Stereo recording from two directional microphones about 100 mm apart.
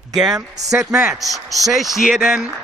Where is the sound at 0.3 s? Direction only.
35° right (ahead or behind).